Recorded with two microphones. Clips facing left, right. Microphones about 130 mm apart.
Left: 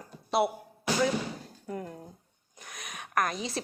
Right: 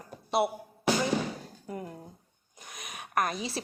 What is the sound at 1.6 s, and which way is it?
Speech, 5° right (ahead or behind).